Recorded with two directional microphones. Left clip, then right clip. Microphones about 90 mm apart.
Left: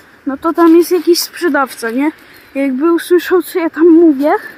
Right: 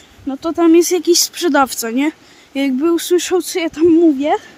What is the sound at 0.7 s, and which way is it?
Speech, 35° right (ahead or behind).